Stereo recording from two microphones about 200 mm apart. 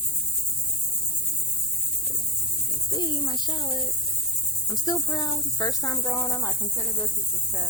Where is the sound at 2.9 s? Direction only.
20° left (ahead or behind).